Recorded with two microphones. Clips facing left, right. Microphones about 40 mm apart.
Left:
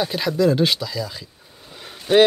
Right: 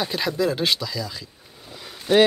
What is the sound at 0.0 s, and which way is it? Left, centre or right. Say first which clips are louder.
Speech: left 4 dB; centre.